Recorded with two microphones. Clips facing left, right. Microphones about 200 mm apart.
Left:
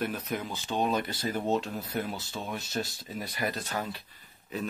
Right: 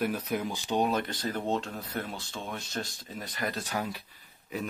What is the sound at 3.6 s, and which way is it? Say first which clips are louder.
Speech: right 1 dB; 10° right (ahead or behind).